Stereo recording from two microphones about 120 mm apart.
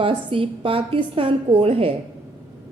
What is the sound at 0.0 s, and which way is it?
A woman's voice, 45° right (ahead or behind).